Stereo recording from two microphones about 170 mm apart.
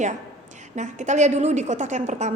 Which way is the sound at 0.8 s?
45° right (ahead or behind).